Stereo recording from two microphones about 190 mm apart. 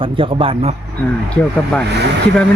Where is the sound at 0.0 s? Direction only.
25° right (ahead or behind).